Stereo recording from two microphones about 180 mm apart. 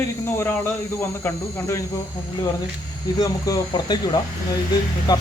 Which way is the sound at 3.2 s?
20° left (ahead or behind).